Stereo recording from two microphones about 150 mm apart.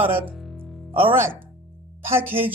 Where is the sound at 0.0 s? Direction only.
15° right (ahead or behind).